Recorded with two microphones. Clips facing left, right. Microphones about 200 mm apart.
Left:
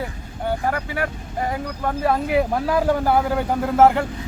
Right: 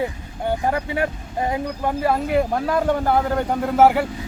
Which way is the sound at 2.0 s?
Centre (ahead or behind).